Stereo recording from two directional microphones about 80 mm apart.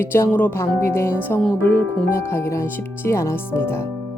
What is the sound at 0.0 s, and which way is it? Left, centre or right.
Speech, left.